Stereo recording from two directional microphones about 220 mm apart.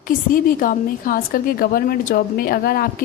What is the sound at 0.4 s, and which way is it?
A woman's voice, 40° left (ahead or behind).